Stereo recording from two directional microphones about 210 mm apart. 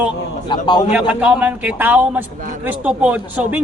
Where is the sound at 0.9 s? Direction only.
5° right (ahead or behind).